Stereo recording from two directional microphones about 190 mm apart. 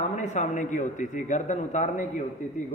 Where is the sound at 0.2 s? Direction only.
40° left (ahead or behind).